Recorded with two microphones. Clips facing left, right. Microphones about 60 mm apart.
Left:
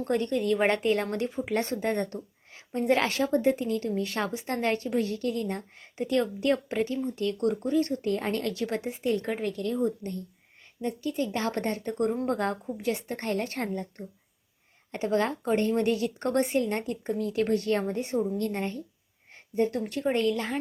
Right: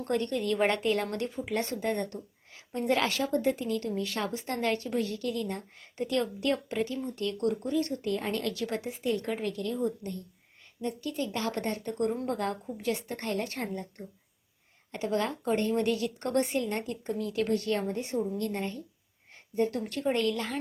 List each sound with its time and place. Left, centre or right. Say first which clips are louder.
0.0 s speech: left 3 dB; left
1.5 s a woman's voice: left 2 dB; left
6.0 s a woman's voice: left 3 dB; left
10.8 s speech: left 3 dB; left
11.3 s a woman's voice: left 3 dB; left
12.8 s a woman's voice: left 1 dB; left
14.9 s a woman's voice: left 3 dB; left
19.3 s a sound: left 2 dB; left
20.1 s a woman's voice: left 4 dB; centre